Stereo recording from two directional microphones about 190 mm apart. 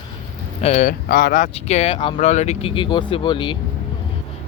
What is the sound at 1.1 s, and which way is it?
Speech, 50° left (ahead or behind).